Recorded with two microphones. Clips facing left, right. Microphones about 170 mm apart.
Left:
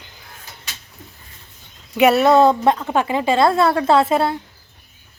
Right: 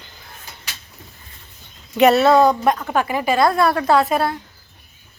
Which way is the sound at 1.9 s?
10° left (ahead or behind).